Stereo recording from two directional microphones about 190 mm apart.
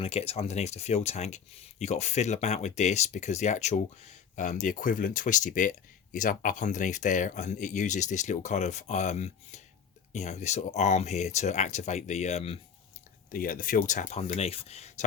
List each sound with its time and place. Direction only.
0.0 s speech: 35° left (ahead or behind)
13.3 s speech: 45° left (ahead or behind)